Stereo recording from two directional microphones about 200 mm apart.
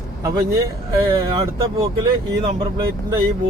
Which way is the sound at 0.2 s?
15° right (ahead or behind).